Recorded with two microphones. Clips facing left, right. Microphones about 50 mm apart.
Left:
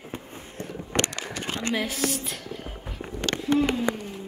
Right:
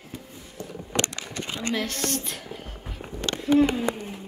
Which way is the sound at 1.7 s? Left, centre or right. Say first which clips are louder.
Even; centre.